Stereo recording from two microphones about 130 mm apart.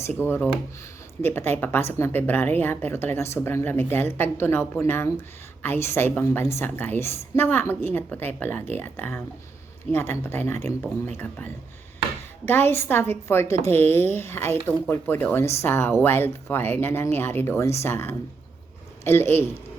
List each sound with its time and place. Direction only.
0.2 s a woman's voice: 15° left (ahead or behind)
12.5 s a woman's voice: 15° left (ahead or behind)